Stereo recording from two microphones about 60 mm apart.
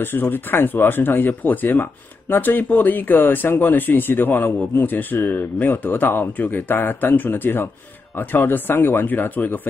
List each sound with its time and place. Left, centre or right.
0.0 s speech: left